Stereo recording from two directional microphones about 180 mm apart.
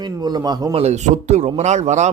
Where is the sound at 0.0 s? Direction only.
25° right (ahead or behind).